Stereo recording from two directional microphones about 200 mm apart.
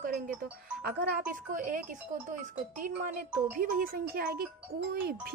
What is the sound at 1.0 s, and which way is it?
Speech, 45° right (ahead or behind).